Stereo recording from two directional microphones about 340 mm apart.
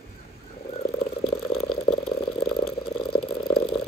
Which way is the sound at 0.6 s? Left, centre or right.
Centre.